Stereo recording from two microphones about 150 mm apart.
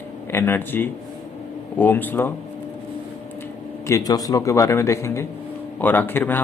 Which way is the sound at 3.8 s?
20° left (ahead or behind).